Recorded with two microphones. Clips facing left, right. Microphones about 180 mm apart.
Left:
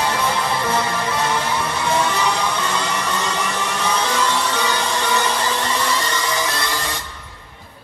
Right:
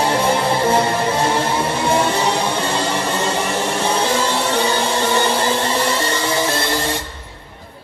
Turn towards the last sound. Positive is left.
turn(degrees=-30)  # may be behind; listen again after turning